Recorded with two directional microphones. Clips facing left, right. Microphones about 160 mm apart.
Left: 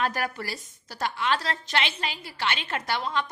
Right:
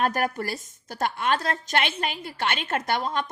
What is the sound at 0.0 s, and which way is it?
A woman's voice, 50° right (ahead or behind).